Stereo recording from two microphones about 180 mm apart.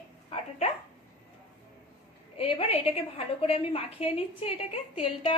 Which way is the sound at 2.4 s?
30° left (ahead or behind).